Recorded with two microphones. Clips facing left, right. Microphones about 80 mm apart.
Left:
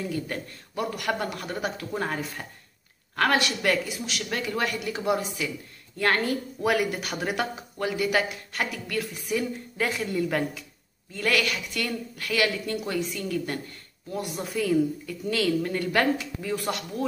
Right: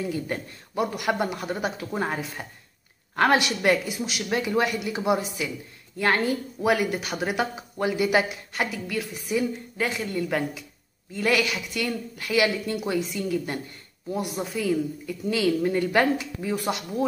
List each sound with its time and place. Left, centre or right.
0.0 s a woman's voice: centre